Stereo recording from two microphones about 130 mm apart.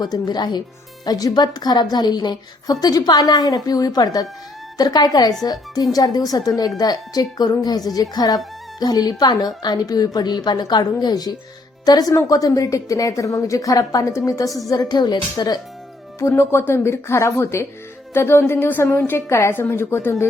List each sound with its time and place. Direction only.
0.0 s a woman's voice: 30° left (ahead or behind)
16.2 s a woman's voice: 20° left (ahead or behind)